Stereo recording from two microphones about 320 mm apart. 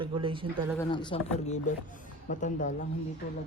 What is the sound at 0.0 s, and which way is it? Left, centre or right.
Speech, centre.